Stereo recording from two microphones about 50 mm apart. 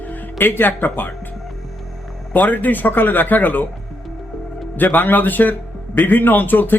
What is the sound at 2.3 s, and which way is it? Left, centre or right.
A man's voice, left.